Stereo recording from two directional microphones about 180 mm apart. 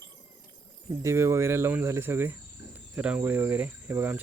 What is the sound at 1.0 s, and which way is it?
Speech, 15° right (ahead or behind).